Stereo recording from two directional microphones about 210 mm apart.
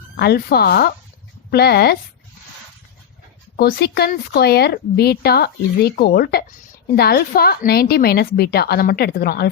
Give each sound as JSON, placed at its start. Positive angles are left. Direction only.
{"t": 0.2, "sound": "speech", "side_deg": 50}
{"t": 3.6, "sound": "speech", "side_deg": 50}